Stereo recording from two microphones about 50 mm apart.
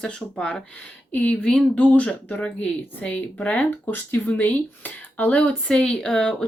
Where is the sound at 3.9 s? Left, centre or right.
Left.